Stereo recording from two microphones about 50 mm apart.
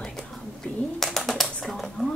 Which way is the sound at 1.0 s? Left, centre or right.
Centre.